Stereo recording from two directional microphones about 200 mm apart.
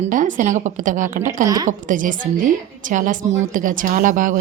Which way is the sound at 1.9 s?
40° right (ahead or behind).